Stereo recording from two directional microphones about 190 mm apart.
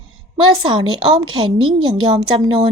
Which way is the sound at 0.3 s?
25° right (ahead or behind).